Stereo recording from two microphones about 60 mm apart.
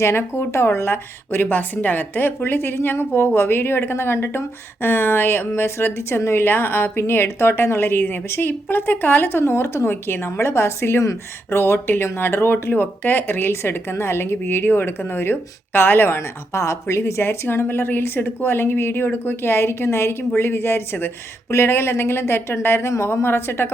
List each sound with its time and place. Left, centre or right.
0.0 s a woman's voice: left